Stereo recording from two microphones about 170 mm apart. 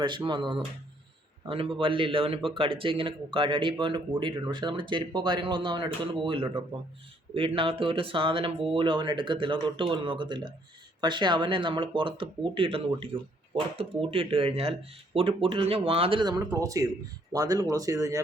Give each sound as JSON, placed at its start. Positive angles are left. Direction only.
{"t": 0.3, "sound": "a man's voice", "side_deg": -25}